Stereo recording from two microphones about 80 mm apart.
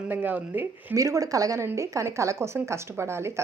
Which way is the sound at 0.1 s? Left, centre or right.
Right.